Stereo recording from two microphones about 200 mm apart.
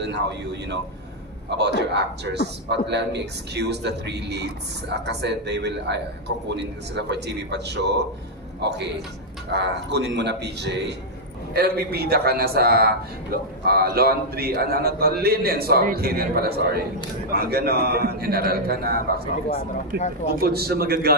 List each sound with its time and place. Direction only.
0.0 s a man's voice: 60° right (ahead or behind)